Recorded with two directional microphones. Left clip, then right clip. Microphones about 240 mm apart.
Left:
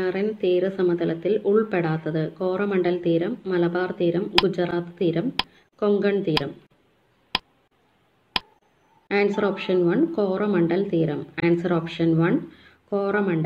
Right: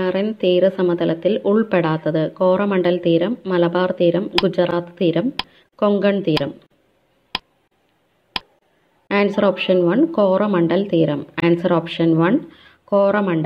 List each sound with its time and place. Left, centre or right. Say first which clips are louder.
0.0 s speech: right 5 dB; right
7.3 s a sound: even; centre
9.0 s speech: right 5 dB; right